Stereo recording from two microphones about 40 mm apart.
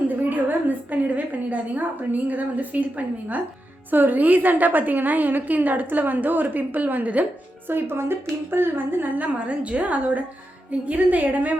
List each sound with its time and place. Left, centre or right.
0.1 s a woman's voice: right
3.9 s a woman's voice: right
7.7 s a woman's voice: right
9.2 s a woman's voice: right